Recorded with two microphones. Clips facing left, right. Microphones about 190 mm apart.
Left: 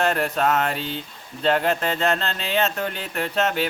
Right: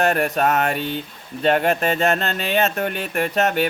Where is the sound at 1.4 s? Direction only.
20° right (ahead or behind).